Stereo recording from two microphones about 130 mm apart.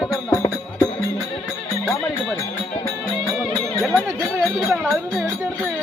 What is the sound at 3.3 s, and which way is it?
Music, centre (ahead or behind).